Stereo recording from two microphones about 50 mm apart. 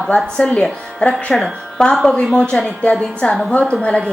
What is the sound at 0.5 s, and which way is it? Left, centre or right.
A woman's voice, left.